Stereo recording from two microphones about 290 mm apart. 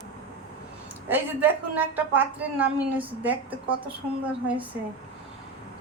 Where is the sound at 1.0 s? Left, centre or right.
Centre.